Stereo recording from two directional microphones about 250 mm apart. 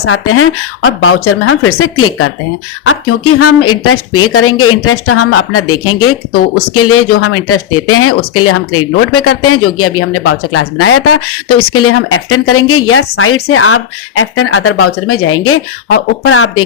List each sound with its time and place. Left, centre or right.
0.0 s speech: left
6.3 s speech: left
7.1 s speech: left